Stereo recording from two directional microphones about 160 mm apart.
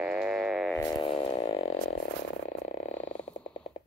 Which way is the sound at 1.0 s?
35° left (ahead or behind).